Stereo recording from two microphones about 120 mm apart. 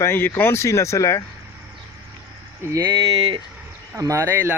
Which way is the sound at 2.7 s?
30° right (ahead or behind).